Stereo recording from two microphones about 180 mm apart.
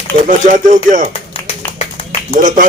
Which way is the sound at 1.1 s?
35° left (ahead or behind).